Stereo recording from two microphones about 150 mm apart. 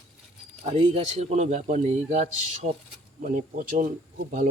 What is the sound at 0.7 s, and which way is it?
Speech, 40° right (ahead or behind).